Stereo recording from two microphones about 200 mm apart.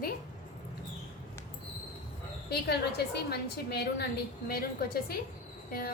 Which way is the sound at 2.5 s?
55° left (ahead or behind).